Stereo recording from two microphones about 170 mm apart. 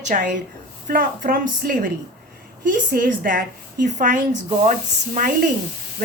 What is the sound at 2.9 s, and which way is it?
A woman's voice, 55° right (ahead or behind).